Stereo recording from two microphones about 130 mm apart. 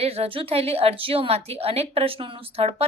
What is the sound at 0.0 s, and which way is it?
A woman's voice, 50° right (ahead or behind).